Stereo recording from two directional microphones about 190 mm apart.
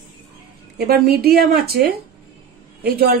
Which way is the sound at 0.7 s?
50° right (ahead or behind).